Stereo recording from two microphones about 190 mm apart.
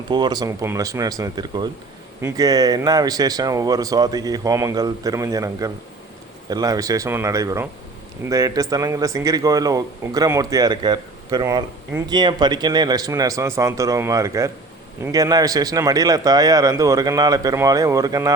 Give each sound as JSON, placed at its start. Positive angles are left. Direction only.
{"t": 0.1, "sound": "speech", "side_deg": -20}